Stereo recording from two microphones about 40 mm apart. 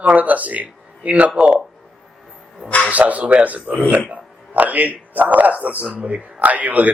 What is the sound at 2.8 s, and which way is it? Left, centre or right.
Speech, right.